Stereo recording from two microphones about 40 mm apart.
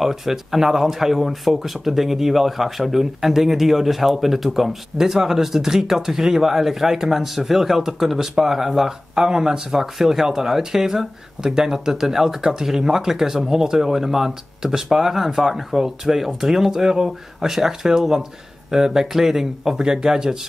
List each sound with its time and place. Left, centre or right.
0.0 s speech: centre